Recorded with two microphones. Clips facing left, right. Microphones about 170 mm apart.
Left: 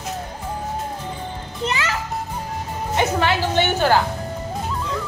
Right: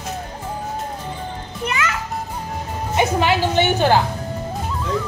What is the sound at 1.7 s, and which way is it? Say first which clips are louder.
Music: right 2 dB; 30° left (ahead or behind).